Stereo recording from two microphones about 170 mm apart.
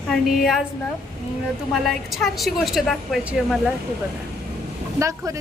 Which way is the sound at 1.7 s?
Centre (ahead or behind).